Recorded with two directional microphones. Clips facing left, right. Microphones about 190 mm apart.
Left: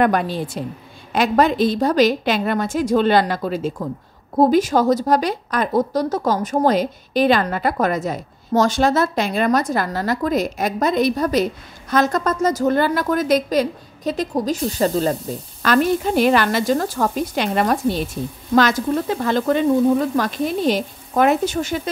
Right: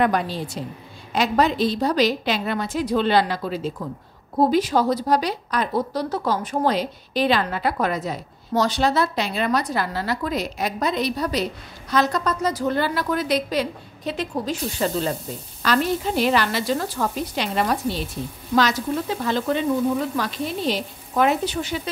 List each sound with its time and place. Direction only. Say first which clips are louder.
0.0 s speech: left 3 dB; 55° left (ahead or behind)
15.6 s speech: left 4 dB; 50° left (ahead or behind)